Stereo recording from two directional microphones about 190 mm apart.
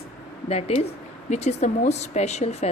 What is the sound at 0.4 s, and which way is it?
Speech, 35° left (ahead or behind).